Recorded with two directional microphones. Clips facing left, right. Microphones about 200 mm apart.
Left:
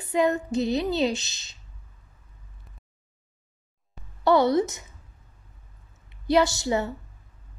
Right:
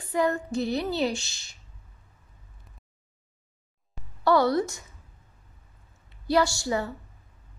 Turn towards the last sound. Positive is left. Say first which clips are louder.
# left 2 dB
turn(degrees=20)  # may be behind; listen again after turning